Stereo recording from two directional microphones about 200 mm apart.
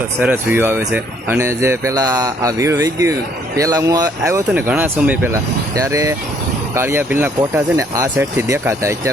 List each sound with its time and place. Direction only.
0.2 s speech: 10° right (ahead or behind)